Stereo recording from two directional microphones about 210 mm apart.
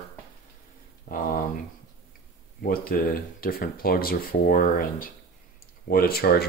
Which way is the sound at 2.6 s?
45° left (ahead or behind).